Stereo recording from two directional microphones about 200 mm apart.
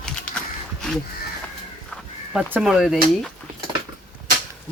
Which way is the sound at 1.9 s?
5° right (ahead or behind).